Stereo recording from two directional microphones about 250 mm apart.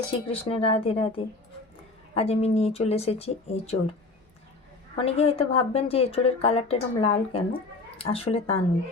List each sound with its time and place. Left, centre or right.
0.1 s speech: left
4.9 s speech: left